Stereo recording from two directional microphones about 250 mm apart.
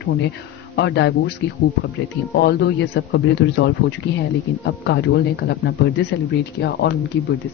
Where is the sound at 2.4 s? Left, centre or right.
Left.